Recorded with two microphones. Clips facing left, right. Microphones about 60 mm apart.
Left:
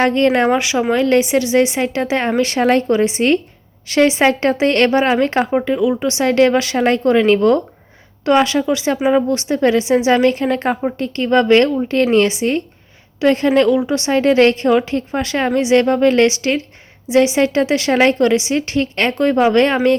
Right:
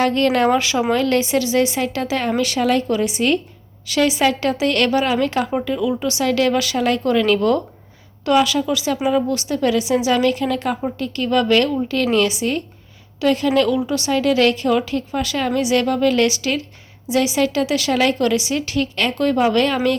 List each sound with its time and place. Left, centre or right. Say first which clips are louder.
0.0 s a woman's voice: left 3 dB; left
13.7 s a woman's voice: left 4 dB; left